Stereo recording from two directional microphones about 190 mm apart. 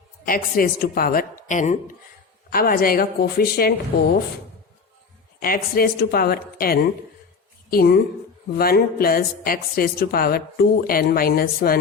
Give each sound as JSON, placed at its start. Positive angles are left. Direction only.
{"t": 0.3, "sound": "a woman's voice", "side_deg": 50}
{"t": 1.5, "sound": "speech", "side_deg": 40}
{"t": 2.5, "sound": "a woman's voice", "side_deg": 50}
{"t": 5.4, "sound": "a woman's voice", "side_deg": 50}